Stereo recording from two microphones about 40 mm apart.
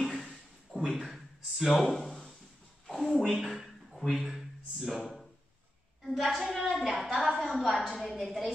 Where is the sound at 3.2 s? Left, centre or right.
Centre.